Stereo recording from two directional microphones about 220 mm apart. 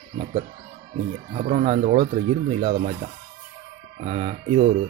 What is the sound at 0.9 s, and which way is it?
Speech, 35° right (ahead or behind).